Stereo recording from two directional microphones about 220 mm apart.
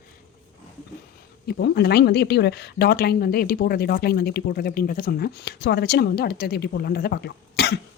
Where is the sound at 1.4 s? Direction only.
50° left (ahead or behind).